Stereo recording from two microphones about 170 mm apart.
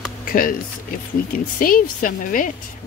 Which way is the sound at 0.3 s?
55° left (ahead or behind).